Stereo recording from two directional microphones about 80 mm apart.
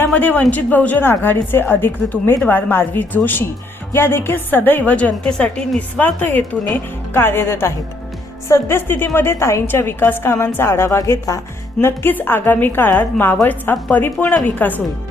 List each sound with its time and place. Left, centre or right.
0.0 s a man's voice: left
11.8 s a woman's voice: left